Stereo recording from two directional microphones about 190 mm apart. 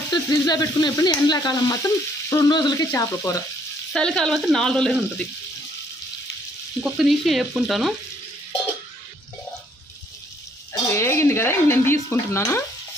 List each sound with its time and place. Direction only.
0.1 s speech: 20° left (ahead or behind)
3.9 s speech: 5° left (ahead or behind)
6.8 s speech: centre (ahead or behind)
10.7 s speech: 15° left (ahead or behind)